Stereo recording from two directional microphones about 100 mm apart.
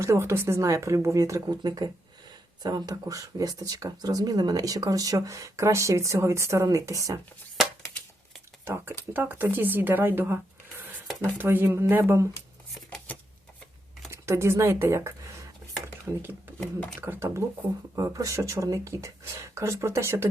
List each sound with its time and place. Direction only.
0.0 s a woman's voice: 25° right (ahead or behind)
1.6 s speech: 45° right (ahead or behind)
8.6 s a woman's voice: 25° right (ahead or behind)
14.1 s speech: 25° right (ahead or behind)
16.6 s speech: 10° left (ahead or behind)
17.0 s a woman's voice: 20° right (ahead or behind)
17.9 s speech: 35° right (ahead or behind)